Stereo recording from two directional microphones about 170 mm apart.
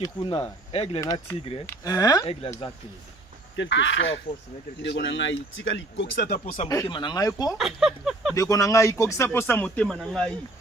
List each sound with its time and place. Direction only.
0.0 s speech: 30° left (ahead or behind)
3.5 s speech: 90° left; by 6.6 s 55° left (ahead or behind)
6.7 s speech: 25° left (ahead or behind)
7.5 s speech: centre (ahead or behind)
8.4 s speech: 20° left (ahead or behind); by 10.3 s centre (ahead or behind)